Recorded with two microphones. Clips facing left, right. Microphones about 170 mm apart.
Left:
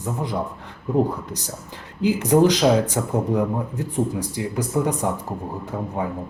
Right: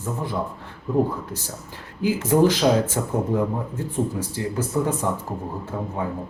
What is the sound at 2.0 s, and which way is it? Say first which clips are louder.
Speech: left 2 dB; 20° left (ahead or behind).